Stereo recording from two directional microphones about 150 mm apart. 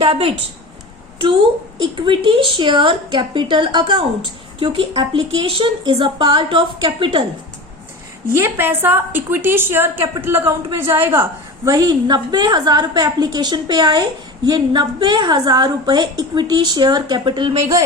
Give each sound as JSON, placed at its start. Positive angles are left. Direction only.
{"t": 0.0, "sound": "speech", "side_deg": -40}
{"t": 1.8, "sound": "speech", "side_deg": -35}
{"t": 8.3, "sound": "a woman's voice", "side_deg": -15}